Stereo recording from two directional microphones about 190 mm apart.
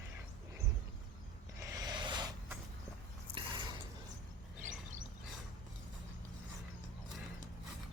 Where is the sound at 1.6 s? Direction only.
20° right (ahead or behind).